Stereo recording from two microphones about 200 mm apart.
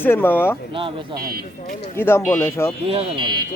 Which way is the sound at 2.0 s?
10° left (ahead or behind).